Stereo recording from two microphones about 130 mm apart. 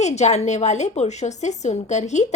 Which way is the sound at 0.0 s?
60° left (ahead or behind).